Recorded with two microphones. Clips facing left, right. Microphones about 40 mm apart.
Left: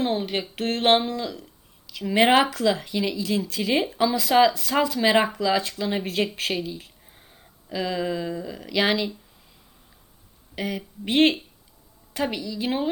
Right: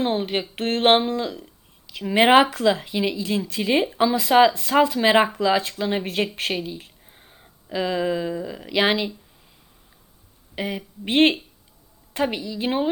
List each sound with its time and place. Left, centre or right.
0.0 s speech: centre
10.5 s speech: centre